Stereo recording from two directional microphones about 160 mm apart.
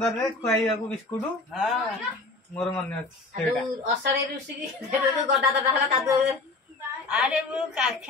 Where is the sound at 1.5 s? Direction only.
Centre (ahead or behind).